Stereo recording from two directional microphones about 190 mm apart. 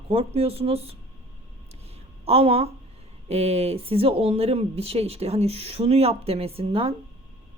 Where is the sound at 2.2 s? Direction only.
30° right (ahead or behind).